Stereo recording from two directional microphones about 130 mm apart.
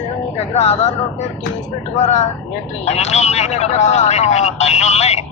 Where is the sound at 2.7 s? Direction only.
60° left (ahead or behind).